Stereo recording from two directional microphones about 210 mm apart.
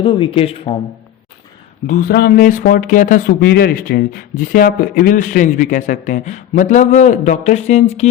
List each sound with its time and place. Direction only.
0.0 s speech: 25° left (ahead or behind)
1.9 s speech: 45° left (ahead or behind)